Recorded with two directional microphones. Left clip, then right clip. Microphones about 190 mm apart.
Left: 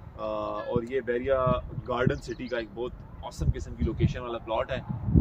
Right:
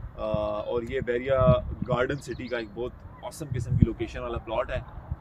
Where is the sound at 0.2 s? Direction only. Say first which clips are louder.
Right 3 dB; 50° right (ahead or behind).